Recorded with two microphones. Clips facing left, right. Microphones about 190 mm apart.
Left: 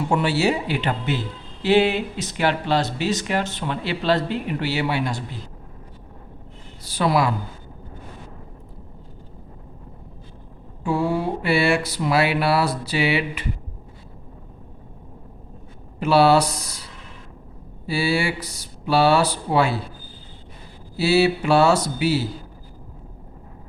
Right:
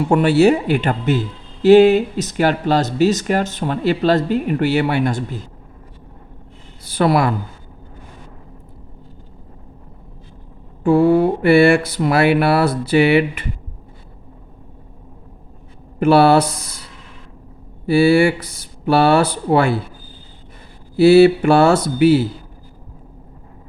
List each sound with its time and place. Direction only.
0.1 s speech: 55° right (ahead or behind)
6.8 s mantra: 55° right (ahead or behind)
10.8 s mantra: 55° right (ahead or behind)
16.0 s speech: 55° right (ahead or behind)
17.8 s speech: 55° right (ahead or behind)
20.9 s speech: 55° right (ahead or behind)